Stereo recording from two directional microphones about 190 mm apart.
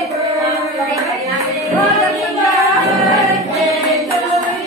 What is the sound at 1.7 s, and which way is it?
Music, centre (ahead or behind).